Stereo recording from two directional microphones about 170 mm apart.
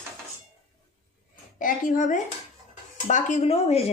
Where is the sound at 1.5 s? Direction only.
55° left (ahead or behind); by 3.9 s 35° left (ahead or behind).